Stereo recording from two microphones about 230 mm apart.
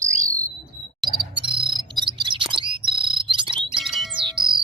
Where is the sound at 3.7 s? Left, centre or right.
Centre.